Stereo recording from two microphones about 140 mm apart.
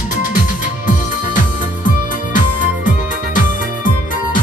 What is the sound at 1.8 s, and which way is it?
Music, 70° left (ahead or behind).